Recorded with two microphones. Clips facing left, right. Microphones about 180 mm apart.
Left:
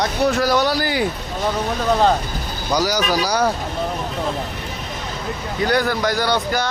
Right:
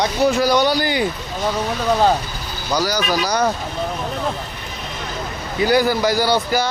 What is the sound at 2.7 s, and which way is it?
Speech, 15° left (ahead or behind).